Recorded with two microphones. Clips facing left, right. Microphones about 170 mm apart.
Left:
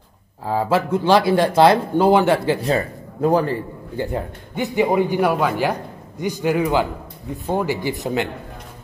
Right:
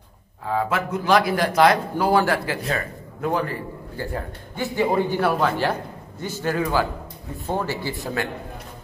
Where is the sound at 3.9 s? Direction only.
20° left (ahead or behind).